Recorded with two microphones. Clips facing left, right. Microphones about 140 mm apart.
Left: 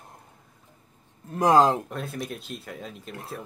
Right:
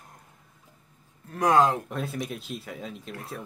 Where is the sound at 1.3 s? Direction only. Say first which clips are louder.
Left 2 dB; 25° left (ahead or behind).